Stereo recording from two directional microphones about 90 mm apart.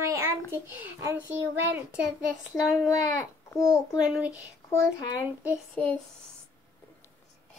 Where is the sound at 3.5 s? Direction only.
35° left (ahead or behind).